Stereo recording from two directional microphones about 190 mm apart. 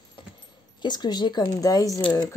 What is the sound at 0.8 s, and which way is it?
Speech, 20° left (ahead or behind).